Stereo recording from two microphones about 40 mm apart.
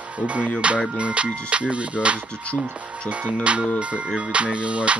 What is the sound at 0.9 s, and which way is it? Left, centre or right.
Speech, right.